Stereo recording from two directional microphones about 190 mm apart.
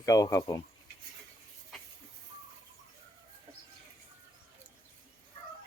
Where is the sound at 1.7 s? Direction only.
Centre (ahead or behind).